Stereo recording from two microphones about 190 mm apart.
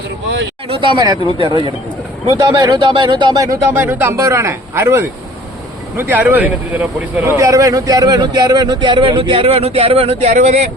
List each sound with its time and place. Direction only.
0.7 s speech: 25° right (ahead or behind)